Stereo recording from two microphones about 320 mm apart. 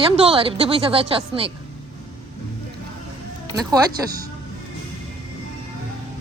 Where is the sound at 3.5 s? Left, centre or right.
Centre.